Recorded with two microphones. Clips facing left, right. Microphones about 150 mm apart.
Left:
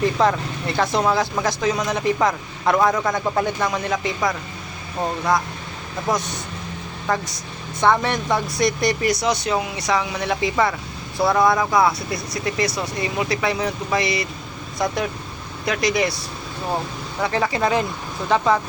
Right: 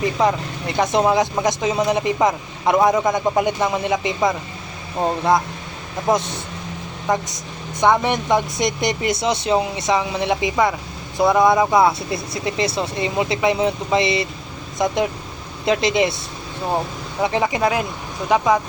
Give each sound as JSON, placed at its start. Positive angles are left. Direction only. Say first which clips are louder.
{"t": 0.2, "sound": "speech", "louder": "even", "side_deg": -15}
{"t": 17.2, "sound": "speech", "louder": "right 2 dB", "side_deg": -20}
{"t": 17.6, "sound": "speech", "louder": "even", "side_deg": -5}